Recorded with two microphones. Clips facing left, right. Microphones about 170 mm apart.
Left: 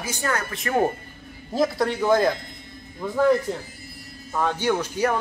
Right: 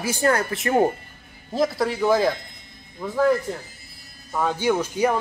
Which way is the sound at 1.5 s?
Centre (ahead or behind).